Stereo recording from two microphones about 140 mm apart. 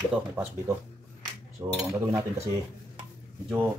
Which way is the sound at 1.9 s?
20° right (ahead or behind).